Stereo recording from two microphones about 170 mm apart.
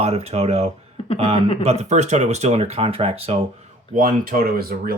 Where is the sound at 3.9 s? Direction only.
55° right (ahead or behind).